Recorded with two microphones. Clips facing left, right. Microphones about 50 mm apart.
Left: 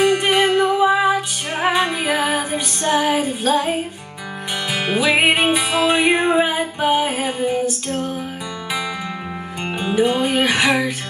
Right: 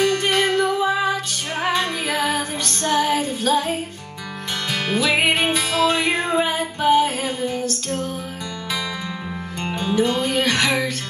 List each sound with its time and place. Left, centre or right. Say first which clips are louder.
0.0 s music: left 3 dB; centre
4.7 s music: left 3 dB; centre
9.6 s music: left 2 dB; centre